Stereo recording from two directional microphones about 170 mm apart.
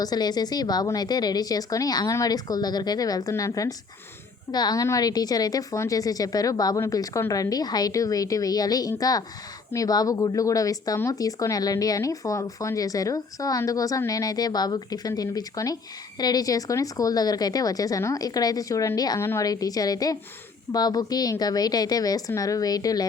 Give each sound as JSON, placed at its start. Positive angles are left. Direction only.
{"t": 0.0, "sound": "speech", "side_deg": 25}